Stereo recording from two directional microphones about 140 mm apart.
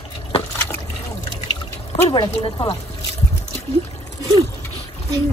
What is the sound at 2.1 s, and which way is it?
Speech, 30° left (ahead or behind).